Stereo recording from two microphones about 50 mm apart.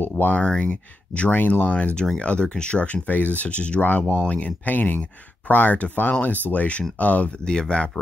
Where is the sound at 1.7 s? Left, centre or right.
Left.